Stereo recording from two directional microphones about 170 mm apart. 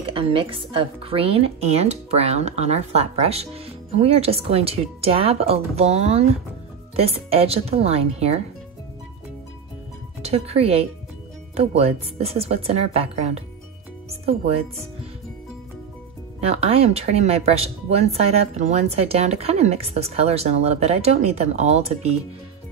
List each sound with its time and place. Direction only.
0.0 s speech: 30° right (ahead or behind)
10.2 s speech: 35° right (ahead or behind)
16.3 s speech: 35° right (ahead or behind)